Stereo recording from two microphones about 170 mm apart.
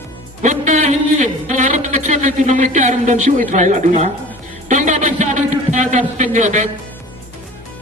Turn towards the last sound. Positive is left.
turn(degrees=-45)  # may be behind; listen again after turning